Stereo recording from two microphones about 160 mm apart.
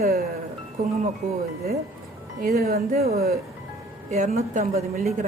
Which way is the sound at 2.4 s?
75° right (ahead or behind).